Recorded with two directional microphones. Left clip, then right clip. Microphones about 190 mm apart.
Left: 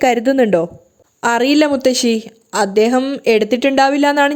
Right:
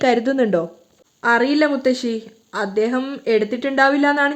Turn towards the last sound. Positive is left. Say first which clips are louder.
# left 3 dB
turn(degrees=35)  # may be behind; listen again after turning